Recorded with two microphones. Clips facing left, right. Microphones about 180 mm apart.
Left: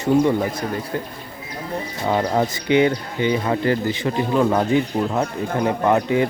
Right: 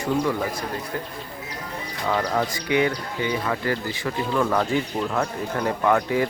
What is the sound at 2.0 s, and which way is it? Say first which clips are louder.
Speech: left 4 dB; 25° left (ahead or behind).